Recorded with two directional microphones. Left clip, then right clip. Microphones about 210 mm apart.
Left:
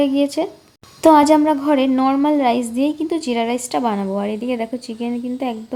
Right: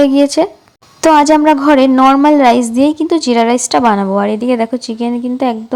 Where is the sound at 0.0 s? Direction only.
20° right (ahead or behind).